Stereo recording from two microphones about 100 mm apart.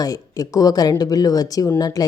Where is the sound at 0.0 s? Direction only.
40° left (ahead or behind).